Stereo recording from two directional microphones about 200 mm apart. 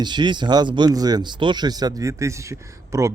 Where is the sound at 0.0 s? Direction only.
20° right (ahead or behind).